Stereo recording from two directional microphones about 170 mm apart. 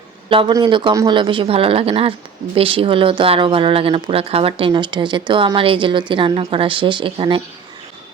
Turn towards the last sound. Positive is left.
turn(degrees=-30)  # may be behind; listen again after turning